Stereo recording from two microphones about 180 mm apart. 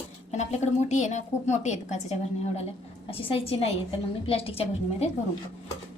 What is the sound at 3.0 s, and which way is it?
A woman's voice, 30° left (ahead or behind).